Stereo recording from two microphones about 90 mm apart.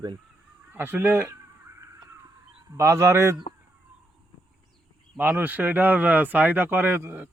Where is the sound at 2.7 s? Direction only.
30° right (ahead or behind).